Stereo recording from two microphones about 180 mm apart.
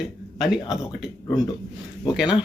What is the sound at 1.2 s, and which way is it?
Speech, 20° left (ahead or behind).